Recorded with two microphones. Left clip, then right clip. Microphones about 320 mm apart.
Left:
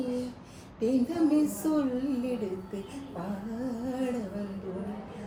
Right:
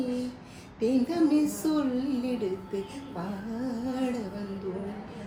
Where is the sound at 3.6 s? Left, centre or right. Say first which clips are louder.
Right 1 dB; centre.